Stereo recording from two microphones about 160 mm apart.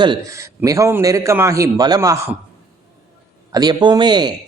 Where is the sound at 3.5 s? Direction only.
25° right (ahead or behind).